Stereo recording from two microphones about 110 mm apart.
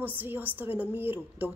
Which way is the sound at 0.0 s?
20° right (ahead or behind).